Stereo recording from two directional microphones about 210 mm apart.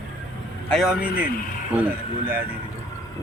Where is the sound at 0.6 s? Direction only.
Centre (ahead or behind).